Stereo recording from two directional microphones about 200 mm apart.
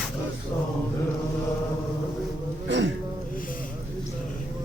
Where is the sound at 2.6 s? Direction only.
65° right (ahead or behind).